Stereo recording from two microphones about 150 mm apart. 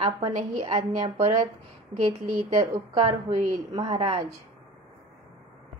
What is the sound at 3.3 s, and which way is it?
Speech, 40° right (ahead or behind).